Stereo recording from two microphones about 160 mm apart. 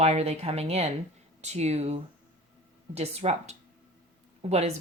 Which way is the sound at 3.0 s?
40° right (ahead or behind).